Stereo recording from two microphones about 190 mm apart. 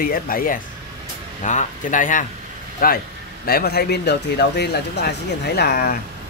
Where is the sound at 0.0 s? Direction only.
50° left (ahead or behind).